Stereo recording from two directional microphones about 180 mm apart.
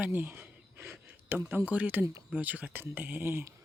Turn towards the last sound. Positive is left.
turn(degrees=-15)  # may be behind; listen again after turning